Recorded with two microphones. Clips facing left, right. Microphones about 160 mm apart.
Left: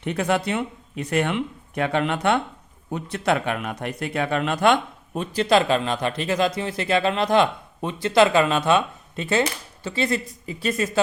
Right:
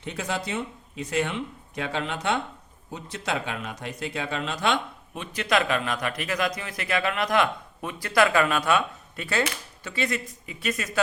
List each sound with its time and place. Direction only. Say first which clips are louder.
0.0 s speech: left 8 dB; 60° left (ahead or behind)
5.1 s speech: left 6 dB; 35° left (ahead or behind)